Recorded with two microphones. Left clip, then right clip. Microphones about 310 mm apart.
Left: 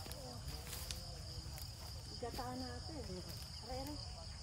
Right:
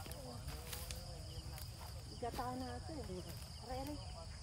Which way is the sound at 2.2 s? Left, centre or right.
Centre.